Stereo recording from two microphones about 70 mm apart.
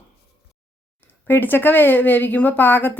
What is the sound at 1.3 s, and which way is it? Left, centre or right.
Speech, left.